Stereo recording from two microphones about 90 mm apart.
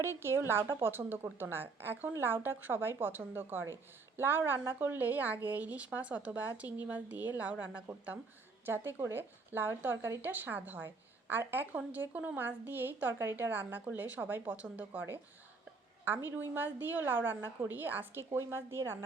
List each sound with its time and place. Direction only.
0.0 s a woman's voice: 30° right (ahead or behind)